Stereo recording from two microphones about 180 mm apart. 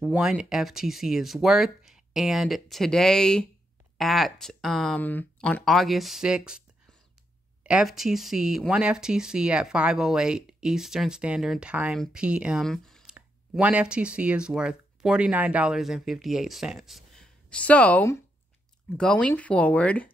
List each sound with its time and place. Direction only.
0.0 s speech: 5° right (ahead or behind)
7.6 s speech: 5° right (ahead or behind)